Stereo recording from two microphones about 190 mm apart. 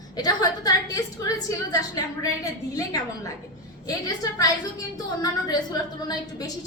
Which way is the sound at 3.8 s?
20° left (ahead or behind).